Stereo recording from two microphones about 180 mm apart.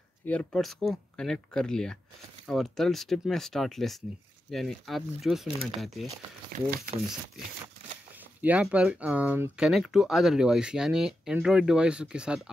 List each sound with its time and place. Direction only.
0.3 s speech: 5° left (ahead or behind)
6.5 s speech: 50° right (ahead or behind)
8.4 s speech: 10° right (ahead or behind)